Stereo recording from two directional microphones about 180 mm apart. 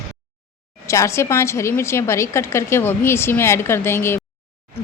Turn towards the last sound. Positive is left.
turn(degrees=15)  # may be behind; listen again after turning